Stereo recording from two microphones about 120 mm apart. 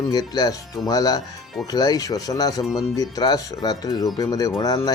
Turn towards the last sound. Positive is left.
turn(degrees=30)  # may be behind; listen again after turning